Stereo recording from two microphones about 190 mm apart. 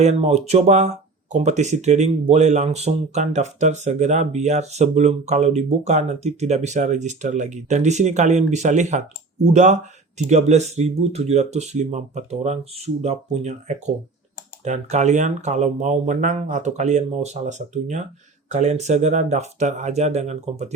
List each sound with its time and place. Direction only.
0.0 s speech: 35° right (ahead or behind)